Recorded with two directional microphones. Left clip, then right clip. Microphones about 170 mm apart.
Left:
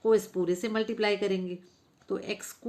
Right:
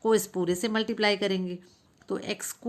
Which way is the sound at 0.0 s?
40° right (ahead or behind).